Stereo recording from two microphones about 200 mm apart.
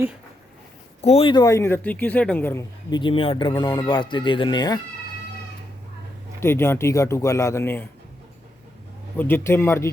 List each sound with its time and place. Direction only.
1.0 s speech: 30° left (ahead or behind)
6.4 s speech: 10° left (ahead or behind)
9.1 s speech: 10° left (ahead or behind)